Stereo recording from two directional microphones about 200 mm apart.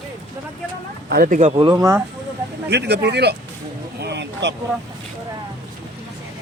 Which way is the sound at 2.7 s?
55° right (ahead or behind).